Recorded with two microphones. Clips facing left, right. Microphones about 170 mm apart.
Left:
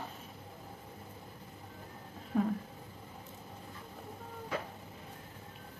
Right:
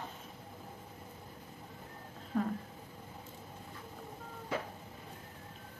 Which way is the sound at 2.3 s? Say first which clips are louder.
Left 2 dB; 5° left (ahead or behind).